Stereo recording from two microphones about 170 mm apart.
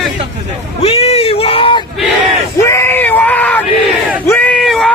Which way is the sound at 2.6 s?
15° left (ahead or behind).